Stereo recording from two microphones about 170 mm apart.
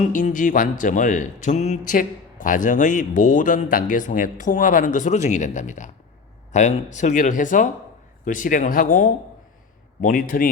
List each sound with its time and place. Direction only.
0.0 s speech: 50° left (ahead or behind)